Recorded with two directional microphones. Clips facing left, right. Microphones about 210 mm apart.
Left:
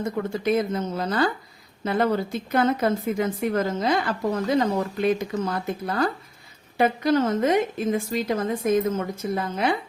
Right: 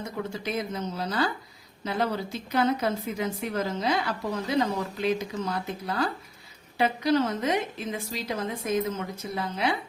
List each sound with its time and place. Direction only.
0.0 s a woman's voice: 55° left (ahead or behind)